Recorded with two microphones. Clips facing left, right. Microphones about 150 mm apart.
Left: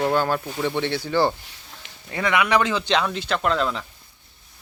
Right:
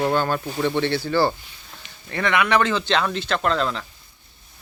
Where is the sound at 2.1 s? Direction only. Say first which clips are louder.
Even; 15° left (ahead or behind).